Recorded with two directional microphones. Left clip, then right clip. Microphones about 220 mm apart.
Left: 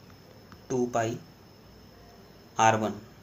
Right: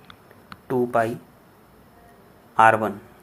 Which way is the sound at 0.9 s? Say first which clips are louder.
Right 8 dB; 25° right (ahead or behind).